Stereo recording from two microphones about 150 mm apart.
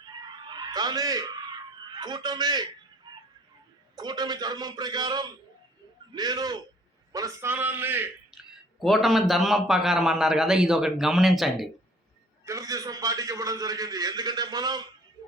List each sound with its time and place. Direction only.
0.0 s a sound: 30° right (ahead or behind)
3.9 s a man's voice: 30° right (ahead or behind); by 11.7 s centre (ahead or behind)
12.5 s a man's voice: 25° right (ahead or behind)